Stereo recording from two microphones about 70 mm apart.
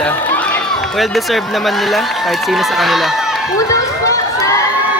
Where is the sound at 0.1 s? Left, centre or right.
Left.